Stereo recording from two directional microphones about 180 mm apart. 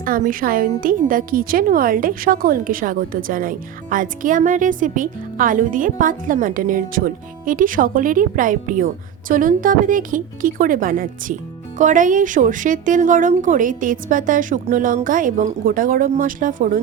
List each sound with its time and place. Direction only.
0.0 s a woman's voice: 50° right (ahead or behind)